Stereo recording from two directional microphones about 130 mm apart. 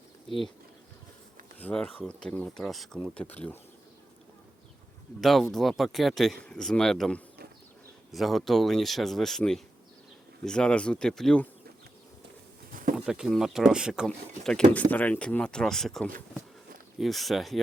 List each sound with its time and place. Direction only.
1.5 s speech: 10° left (ahead or behind)
3.2 s speech: 15° left (ahead or behind)
5.2 s speech: centre (ahead or behind)
12.7 s a sound: 90° right
13.1 s speech: 5° right (ahead or behind)
14.7 s speech: 10° left (ahead or behind)